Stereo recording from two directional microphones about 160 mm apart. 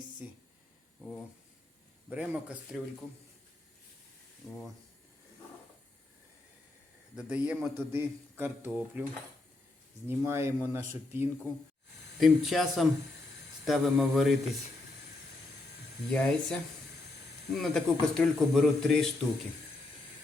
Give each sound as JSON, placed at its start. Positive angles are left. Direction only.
{"t": 2.0, "sound": "a man's voice", "side_deg": -10}
{"t": 4.4, "sound": "a man's voice", "side_deg": 0}
{"t": 7.2, "sound": "a man's voice", "side_deg": -10}
{"t": 10.1, "sound": "a man's voice", "side_deg": -15}
{"t": 12.2, "sound": "a man's voice", "side_deg": 0}
{"t": 16.1, "sound": "a man's voice", "side_deg": 5}